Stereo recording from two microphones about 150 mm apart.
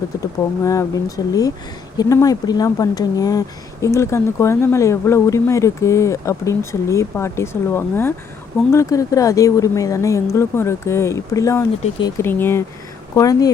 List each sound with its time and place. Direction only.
0.6 s speech: 20° left (ahead or behind)